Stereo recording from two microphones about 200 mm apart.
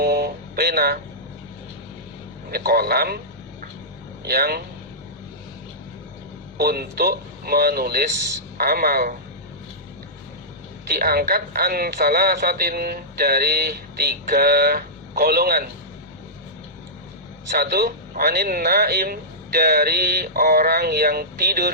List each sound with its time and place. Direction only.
0.0 s speech: 50° right (ahead or behind)
2.5 s speech: 50° right (ahead or behind)
4.3 s speech: 50° right (ahead or behind)
6.6 s speech: 50° right (ahead or behind)
10.8 s speech: 50° right (ahead or behind)
17.5 s speech: 50° right (ahead or behind)